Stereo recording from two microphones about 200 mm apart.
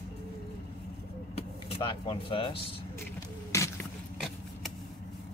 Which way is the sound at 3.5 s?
15° left (ahead or behind).